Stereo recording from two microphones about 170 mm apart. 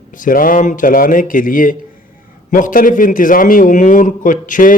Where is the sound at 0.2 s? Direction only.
55° left (ahead or behind).